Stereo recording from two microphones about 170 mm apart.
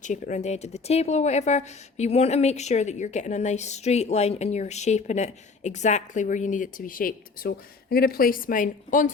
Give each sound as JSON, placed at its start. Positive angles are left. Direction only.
{"t": 0.0, "sound": "speech", "side_deg": 45}